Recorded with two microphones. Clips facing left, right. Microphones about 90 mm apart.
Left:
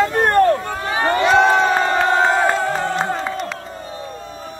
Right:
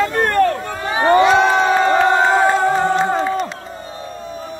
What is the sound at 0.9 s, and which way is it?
Speech, 25° right (ahead or behind).